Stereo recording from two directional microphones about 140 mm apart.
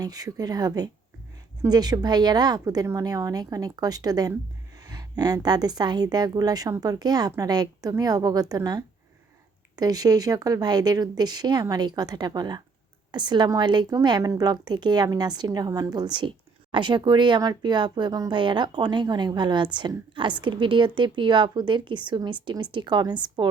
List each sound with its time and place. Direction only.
0.0 s a woman's voice: 25° right (ahead or behind)